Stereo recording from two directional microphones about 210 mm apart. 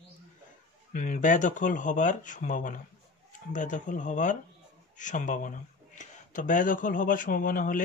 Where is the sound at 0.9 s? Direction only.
40° left (ahead or behind).